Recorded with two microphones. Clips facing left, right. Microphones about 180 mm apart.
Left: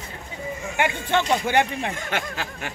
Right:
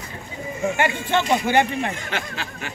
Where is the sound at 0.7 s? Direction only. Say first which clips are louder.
Left 1 dB; 15° left (ahead or behind).